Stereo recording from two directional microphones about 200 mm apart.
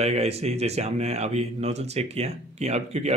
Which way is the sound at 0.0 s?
30° right (ahead or behind).